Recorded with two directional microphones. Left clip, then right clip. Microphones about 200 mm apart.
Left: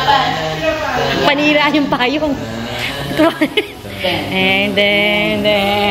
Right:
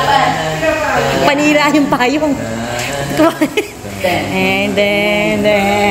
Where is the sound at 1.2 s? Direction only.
5° right (ahead or behind).